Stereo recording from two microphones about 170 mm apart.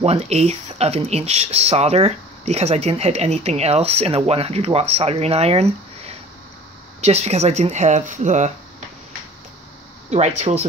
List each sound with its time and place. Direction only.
0.0 s speech: 40° right (ahead or behind)
10.1 s speech: 40° right (ahead or behind)